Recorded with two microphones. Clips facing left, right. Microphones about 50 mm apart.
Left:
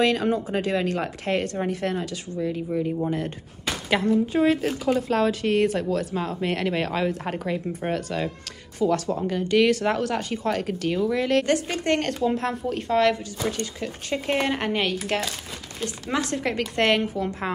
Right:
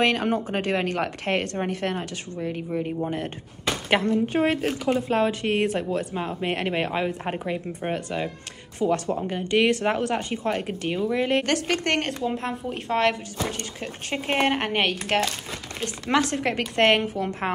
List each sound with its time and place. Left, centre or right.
0.0 s a woman's voice: right
3.9 s a woman's voice: right
4.6 s speech: right
8.7 s speech: right
11.4 s a woman's voice: right
12.2 s speech: centre
12.6 s a woman's voice: right
16.2 s a woman's voice: right